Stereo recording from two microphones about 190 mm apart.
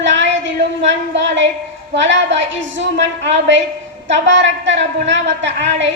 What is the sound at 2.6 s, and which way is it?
Speech, 75° right (ahead or behind).